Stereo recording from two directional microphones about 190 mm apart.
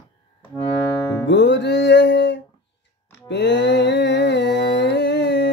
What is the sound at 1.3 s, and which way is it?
Music, 65° left (ahead or behind).